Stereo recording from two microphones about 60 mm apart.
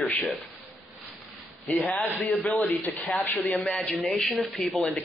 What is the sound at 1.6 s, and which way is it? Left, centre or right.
Speech, left.